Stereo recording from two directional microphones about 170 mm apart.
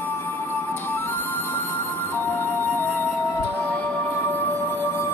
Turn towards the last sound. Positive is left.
turn(degrees=10)  # may be behind; listen again after turning